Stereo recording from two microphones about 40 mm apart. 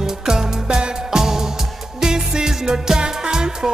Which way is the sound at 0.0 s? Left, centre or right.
Centre.